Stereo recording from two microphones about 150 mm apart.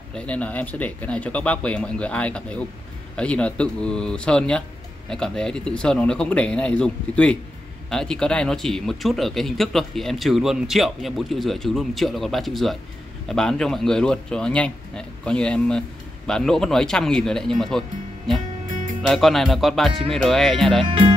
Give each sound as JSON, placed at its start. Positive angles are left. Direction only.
{"t": 0.1, "sound": "speech", "side_deg": 10}
{"t": 20.8, "sound": "speech", "side_deg": -35}